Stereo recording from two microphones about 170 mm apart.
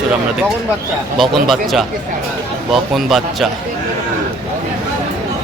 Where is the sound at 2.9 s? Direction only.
Centre (ahead or behind).